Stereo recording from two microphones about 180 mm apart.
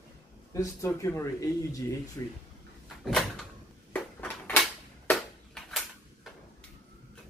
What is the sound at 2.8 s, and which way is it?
Cupboard open or close, centre (ahead or behind).